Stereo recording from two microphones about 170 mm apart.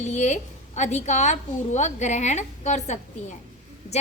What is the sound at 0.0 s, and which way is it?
A woman's voice, 45° left (ahead or behind).